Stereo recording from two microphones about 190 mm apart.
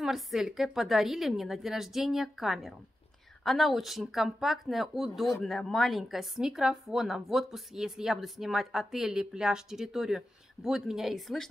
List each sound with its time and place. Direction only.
0.0 s a woman's voice: centre (ahead or behind)